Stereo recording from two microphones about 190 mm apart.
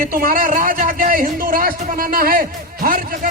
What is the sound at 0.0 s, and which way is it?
A man's voice, 50° right (ahead or behind).